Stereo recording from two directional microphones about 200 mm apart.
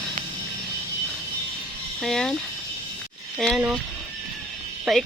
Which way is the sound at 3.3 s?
Centre (ahead or behind).